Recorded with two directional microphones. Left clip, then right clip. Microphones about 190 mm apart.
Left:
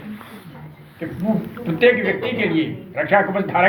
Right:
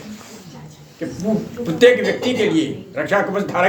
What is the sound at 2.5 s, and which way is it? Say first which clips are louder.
A man's voice: right 2 dB; 40° right (ahead or behind).